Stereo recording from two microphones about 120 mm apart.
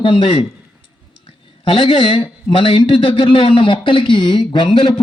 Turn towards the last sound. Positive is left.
turn(degrees=45)  # may be behind; listen again after turning